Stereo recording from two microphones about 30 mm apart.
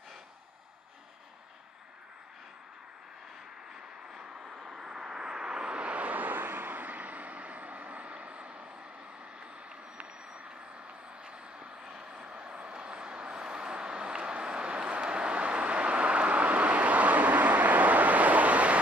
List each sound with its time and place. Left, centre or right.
4.6 s vehicle: centre
4.8 s vehicle: right
11.2 s vehicle: right
11.8 s vehicle: right
12.7 s vehicle: right